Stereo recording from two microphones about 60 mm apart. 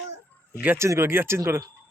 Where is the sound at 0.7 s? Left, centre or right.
Right.